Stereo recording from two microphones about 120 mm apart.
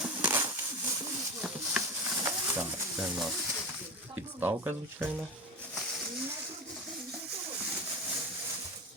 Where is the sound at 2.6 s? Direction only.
5° right (ahead or behind).